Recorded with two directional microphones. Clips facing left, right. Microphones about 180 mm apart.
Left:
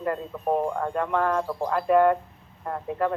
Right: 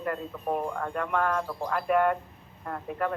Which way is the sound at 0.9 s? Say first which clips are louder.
Left 2 dB; 25° left (ahead or behind).